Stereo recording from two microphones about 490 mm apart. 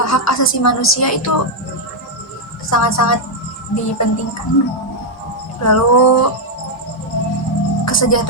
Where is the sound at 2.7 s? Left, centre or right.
Left.